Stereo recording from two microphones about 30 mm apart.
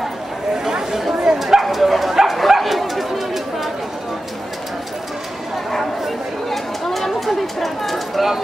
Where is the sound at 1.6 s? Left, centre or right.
Centre.